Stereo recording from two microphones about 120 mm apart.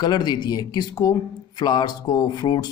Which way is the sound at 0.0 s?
35° left (ahead or behind).